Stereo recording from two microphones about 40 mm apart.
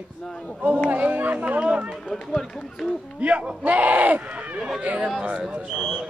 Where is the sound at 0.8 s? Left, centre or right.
Right.